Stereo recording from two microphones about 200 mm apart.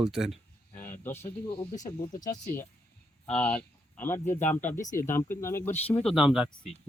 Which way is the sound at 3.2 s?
5° left (ahead or behind).